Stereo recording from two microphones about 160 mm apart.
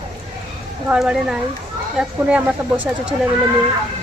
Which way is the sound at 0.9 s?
5° right (ahead or behind).